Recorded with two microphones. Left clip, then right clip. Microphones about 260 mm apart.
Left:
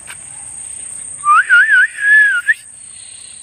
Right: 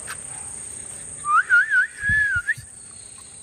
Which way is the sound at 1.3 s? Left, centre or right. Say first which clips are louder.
Left 8 dB; centre.